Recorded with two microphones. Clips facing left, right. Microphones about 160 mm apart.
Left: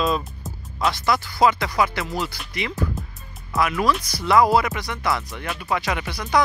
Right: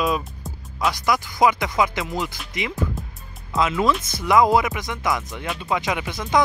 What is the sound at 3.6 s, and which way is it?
Speech, 20° right (ahead or behind).